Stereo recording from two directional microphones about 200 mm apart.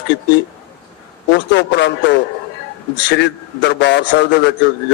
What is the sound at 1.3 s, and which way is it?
Speech, 60° left (ahead or behind).